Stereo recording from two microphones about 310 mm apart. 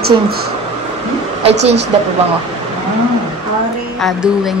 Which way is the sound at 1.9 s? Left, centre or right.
Centre.